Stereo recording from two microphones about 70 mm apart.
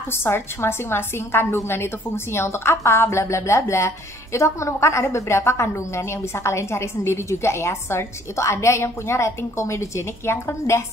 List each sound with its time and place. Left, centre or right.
0.1 s a woman's voice: left